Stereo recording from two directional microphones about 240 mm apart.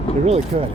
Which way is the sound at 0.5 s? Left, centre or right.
Right.